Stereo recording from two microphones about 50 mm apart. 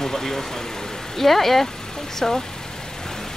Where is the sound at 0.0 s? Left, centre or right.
Centre.